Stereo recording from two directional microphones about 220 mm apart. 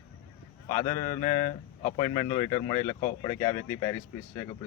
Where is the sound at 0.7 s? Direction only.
35° left (ahead or behind).